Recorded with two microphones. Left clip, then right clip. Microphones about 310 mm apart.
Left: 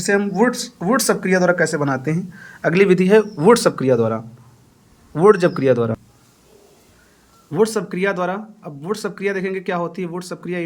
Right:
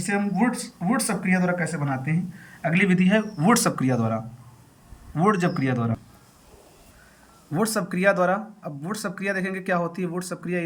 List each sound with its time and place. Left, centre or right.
0.0 s speech: centre
7.5 s speech: centre